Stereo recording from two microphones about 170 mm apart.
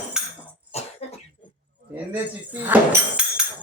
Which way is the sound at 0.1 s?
5° right (ahead or behind).